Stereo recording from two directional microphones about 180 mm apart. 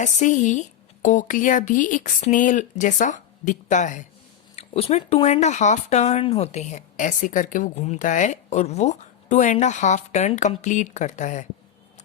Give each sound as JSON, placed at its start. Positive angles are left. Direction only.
{"t": 0.0, "sound": "a woman's voice", "side_deg": 45}